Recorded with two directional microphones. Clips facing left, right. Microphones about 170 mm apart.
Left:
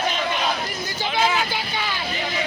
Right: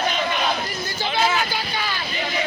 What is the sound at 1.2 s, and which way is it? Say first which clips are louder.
Vehicle: even; 15° left (ahead or behind).